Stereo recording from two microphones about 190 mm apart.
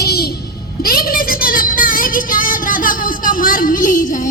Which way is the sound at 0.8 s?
50° left (ahead or behind).